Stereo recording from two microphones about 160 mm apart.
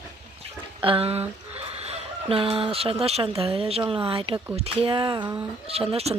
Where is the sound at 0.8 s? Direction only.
35° right (ahead or behind).